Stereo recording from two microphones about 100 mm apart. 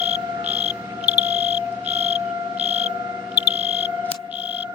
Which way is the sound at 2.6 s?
90° right.